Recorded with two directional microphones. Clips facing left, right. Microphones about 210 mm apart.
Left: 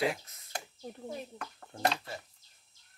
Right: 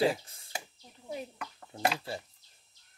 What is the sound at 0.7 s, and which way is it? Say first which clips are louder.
Speech: left 4 dB; 45° left (ahead or behind).